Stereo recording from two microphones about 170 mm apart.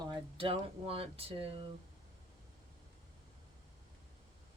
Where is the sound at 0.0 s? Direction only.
30° right (ahead or behind).